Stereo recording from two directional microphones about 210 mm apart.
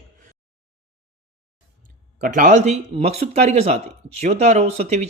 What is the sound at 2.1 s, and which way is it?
Speech, 40° right (ahead or behind).